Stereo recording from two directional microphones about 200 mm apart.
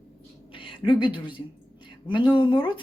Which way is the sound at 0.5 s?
25° left (ahead or behind).